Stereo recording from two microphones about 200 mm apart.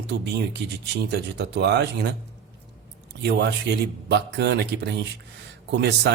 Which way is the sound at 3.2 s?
60° right (ahead or behind).